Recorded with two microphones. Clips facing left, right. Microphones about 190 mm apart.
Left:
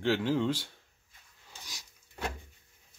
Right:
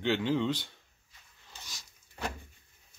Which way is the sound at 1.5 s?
10° left (ahead or behind).